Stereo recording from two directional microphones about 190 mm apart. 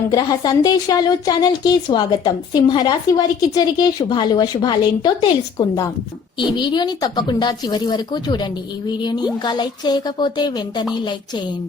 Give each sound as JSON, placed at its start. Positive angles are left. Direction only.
{"t": 0.1, "sound": "speech", "side_deg": 20}